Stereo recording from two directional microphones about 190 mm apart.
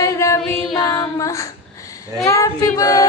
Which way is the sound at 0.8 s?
15° left (ahead or behind).